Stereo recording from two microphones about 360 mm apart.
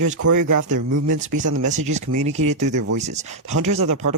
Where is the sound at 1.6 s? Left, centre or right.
Centre.